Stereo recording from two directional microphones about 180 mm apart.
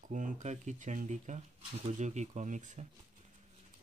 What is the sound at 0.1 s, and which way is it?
Speech, 45° right (ahead or behind).